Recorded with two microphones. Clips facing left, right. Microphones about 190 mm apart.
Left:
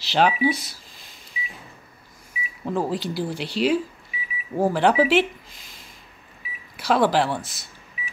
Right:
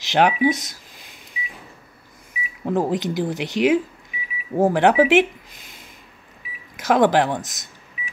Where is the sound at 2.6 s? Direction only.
20° right (ahead or behind).